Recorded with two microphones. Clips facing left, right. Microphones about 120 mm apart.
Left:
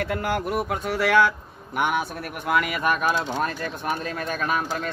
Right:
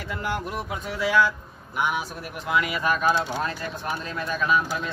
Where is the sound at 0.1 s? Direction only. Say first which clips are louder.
Left 4 dB; 60° left (ahead or behind).